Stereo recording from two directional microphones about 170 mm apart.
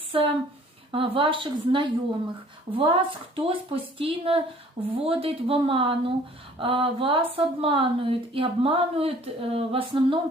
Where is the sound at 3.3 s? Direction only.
30° right (ahead or behind).